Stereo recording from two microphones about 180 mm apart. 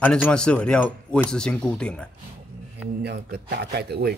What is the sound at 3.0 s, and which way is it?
Speech, 60° right (ahead or behind).